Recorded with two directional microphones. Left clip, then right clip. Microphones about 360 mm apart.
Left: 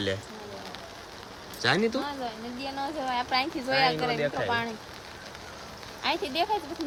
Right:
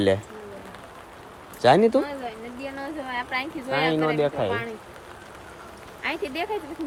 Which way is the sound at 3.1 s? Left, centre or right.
Centre.